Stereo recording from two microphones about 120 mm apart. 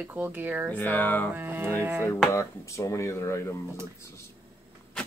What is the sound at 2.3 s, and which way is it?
Speech, 25° left (ahead or behind).